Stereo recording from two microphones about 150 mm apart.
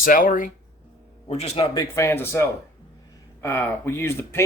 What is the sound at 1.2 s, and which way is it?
Speech, 45° left (ahead or behind).